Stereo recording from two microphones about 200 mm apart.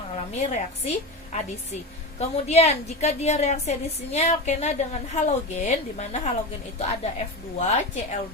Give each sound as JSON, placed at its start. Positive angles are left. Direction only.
{"t": 0.2, "sound": "a woman's voice", "side_deg": 35}